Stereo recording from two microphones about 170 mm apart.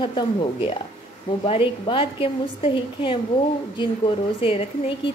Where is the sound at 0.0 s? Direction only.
30° left (ahead or behind).